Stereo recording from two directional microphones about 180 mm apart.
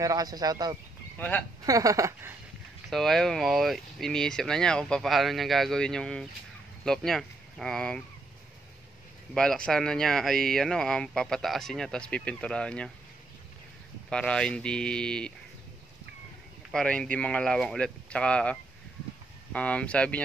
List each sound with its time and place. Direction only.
0.0 s speech: 20° right (ahead or behind)
1.1 s speech: 10° left (ahead or behind)
1.7 s speech: 20° right (ahead or behind)
2.9 s speech: centre (ahead or behind)
9.3 s speech: 5° left (ahead or behind)
14.1 s speech: 5° left (ahead or behind)
16.7 s speech: 5° left (ahead or behind)